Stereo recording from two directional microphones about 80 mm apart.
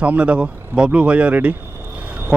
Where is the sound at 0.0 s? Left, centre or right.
Centre.